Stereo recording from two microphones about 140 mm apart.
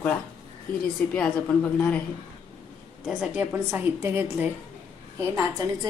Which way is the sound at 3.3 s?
15° right (ahead or behind).